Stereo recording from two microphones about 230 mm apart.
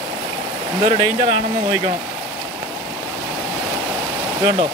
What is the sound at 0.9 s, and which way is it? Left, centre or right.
Speech, left.